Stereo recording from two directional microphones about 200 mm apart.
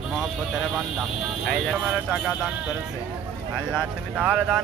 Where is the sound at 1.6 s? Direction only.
5° right (ahead or behind).